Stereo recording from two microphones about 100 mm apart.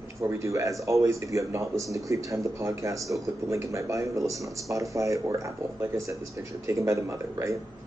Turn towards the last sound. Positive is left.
turn(degrees=-30)  # may be behind; listen again after turning